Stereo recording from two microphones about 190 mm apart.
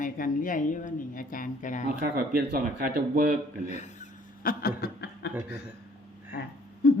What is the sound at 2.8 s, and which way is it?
Speech, 50° right (ahead or behind).